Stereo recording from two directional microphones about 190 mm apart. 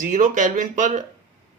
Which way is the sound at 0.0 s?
40° right (ahead or behind).